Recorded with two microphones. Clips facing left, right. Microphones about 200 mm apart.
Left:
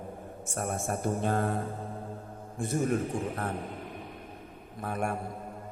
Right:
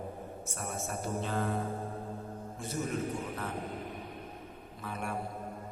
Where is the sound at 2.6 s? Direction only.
50° left (ahead or behind).